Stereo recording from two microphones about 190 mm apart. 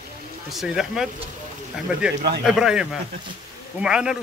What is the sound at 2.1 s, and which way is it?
Speech, 60° right (ahead or behind).